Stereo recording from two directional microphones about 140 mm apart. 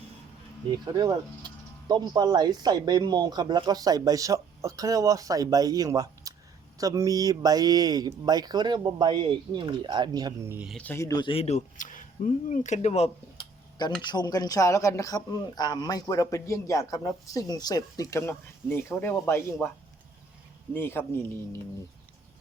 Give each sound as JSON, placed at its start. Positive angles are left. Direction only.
{"t": 0.7, "sound": "speech", "side_deg": -30}
{"t": 10.7, "sound": "a man's voice", "side_deg": 5}
{"t": 10.9, "sound": "speech", "side_deg": 20}
{"t": 11.2, "sound": "speech", "side_deg": 40}
{"t": 14.0, "sound": "speech", "side_deg": 30}
{"t": 20.7, "sound": "a man's voice", "side_deg": 15}